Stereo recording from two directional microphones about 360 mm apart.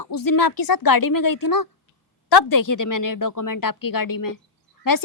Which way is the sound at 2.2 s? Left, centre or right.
Left.